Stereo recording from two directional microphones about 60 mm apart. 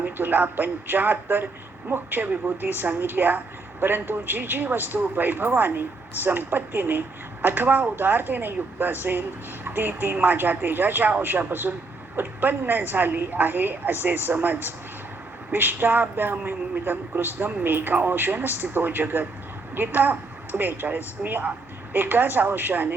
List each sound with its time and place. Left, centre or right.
0.0 s speech: right